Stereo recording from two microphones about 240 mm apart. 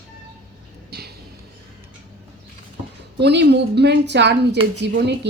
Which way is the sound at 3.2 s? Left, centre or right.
Right.